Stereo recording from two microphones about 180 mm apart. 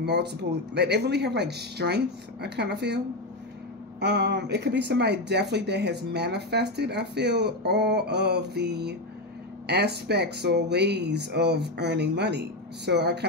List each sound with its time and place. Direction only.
0.0 s speech: 70° right (ahead or behind)
4.0 s speech: 65° right (ahead or behind)